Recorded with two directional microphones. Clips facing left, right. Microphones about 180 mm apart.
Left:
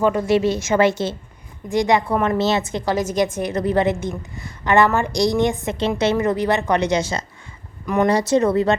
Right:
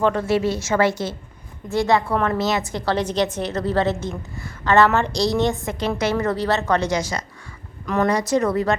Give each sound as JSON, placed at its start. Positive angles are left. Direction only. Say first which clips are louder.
{"t": 0.0, "sound": "a woman's voice", "louder": "left 2 dB", "side_deg": 10}
{"t": 2.4, "sound": "a woman's voice", "louder": "left 3 dB", "side_deg": 25}
{"t": 2.9, "sound": "a woman's voice", "louder": "left 1 dB", "side_deg": 10}